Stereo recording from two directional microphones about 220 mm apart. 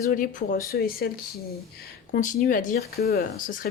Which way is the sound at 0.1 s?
40° left (ahead or behind).